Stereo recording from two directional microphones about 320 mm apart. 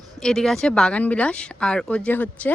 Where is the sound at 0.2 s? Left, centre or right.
Centre.